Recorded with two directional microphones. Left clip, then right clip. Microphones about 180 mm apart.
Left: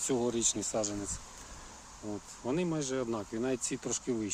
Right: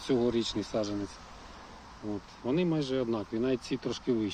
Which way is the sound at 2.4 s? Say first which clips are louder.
Right 3 dB; 5° left (ahead or behind).